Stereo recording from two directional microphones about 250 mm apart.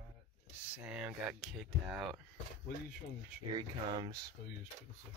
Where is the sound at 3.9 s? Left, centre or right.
Centre.